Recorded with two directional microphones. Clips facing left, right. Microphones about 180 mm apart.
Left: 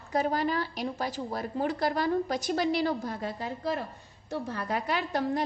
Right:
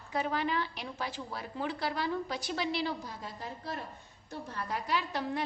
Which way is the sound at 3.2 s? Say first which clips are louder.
Left 8 dB; 75° left (ahead or behind).